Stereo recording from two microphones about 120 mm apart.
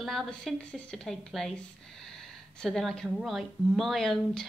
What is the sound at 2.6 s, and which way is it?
A woman's voice, centre (ahead or behind).